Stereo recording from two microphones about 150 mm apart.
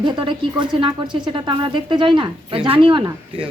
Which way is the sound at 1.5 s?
30° right (ahead or behind).